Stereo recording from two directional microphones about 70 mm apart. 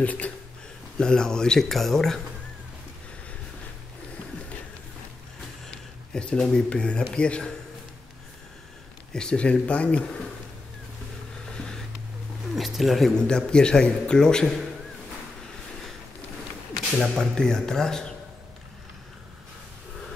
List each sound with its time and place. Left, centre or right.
0.0 s speech: left
0.9 s speech: centre
6.1 s speech: centre
9.1 s speech: centre
11.5 s a sound: centre
12.5 s a sound: centre
13.2 s speech: centre
17.0 s speech: centre